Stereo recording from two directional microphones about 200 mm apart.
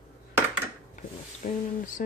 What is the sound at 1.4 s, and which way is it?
Speech, 40° left (ahead or behind).